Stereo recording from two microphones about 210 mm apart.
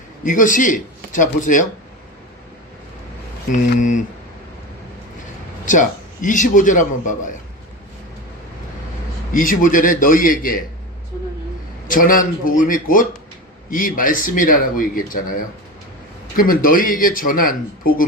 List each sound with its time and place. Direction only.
0.3 s speech: 40° left (ahead or behind)
3.5 s speech: 35° left (ahead or behind)
5.7 s speech: 35° left (ahead or behind)
9.3 s speech: 40° left (ahead or behind)
11.9 s speech: 40° left (ahead or behind)